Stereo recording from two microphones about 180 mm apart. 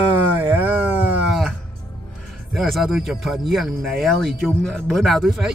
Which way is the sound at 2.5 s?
Centre (ahead or behind).